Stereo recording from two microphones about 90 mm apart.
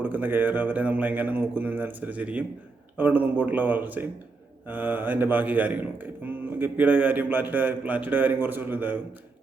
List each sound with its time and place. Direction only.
0.0 s speech: 20° right (ahead or behind)